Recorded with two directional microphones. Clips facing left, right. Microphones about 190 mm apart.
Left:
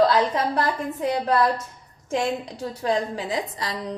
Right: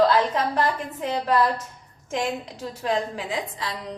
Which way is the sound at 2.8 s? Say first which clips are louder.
Left 1 dB; 35° left (ahead or behind).